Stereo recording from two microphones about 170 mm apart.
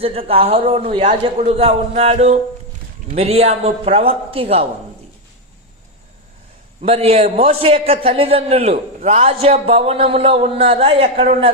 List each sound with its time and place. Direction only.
0.0 s a man's voice: 35° right (ahead or behind)
6.8 s a man's voice: 35° right (ahead or behind)